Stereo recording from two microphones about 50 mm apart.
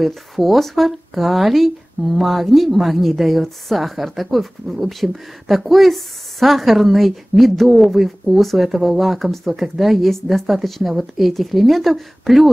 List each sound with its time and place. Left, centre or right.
0.0 s speech: centre